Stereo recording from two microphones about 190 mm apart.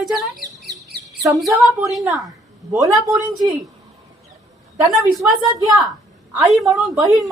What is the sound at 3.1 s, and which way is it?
Speech, 10° right (ahead or behind).